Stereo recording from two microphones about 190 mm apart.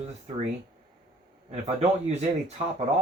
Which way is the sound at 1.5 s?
35° right (ahead or behind).